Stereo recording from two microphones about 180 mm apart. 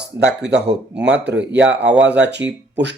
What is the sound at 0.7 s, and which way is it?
Speech, 5° right (ahead or behind).